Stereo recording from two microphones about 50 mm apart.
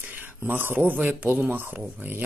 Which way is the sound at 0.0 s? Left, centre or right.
Right.